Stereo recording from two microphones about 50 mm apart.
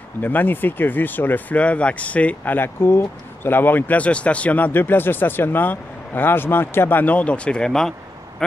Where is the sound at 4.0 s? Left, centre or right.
Left.